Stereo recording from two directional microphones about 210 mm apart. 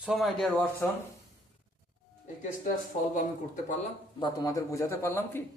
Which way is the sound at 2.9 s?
35° left (ahead or behind).